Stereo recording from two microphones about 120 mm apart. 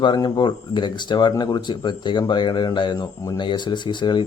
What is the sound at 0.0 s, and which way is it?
Speech, 40° left (ahead or behind).